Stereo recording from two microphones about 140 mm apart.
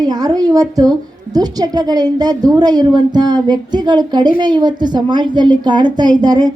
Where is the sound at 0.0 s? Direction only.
30° right (ahead or behind).